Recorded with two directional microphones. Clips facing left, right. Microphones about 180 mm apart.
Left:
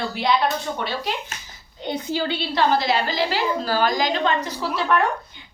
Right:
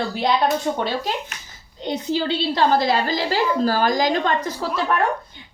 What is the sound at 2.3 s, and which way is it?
A woman's voice, 40° right (ahead or behind).